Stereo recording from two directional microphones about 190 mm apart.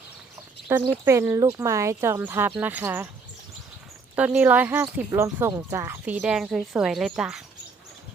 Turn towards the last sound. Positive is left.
turn(degrees=0)  # may be behind; listen again after turning